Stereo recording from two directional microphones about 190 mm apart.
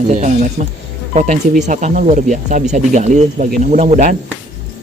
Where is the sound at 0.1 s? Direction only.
40° right (ahead or behind).